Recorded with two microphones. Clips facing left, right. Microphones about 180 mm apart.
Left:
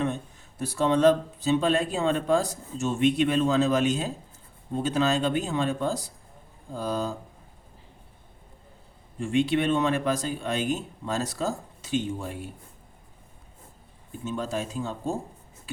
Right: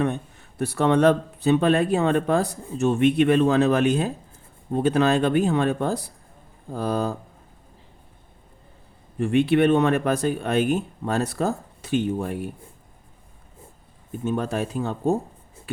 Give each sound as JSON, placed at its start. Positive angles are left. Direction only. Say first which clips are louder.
{"t": 0.0, "sound": "speech", "louder": "right 4 dB", "side_deg": -60}
{"t": 9.1, "sound": "speech", "louder": "right 5 dB", "side_deg": -60}
{"t": 14.1, "sound": "speech", "louder": "right 5 dB", "side_deg": -60}